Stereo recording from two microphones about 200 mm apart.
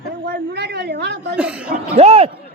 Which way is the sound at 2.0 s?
30° right (ahead or behind).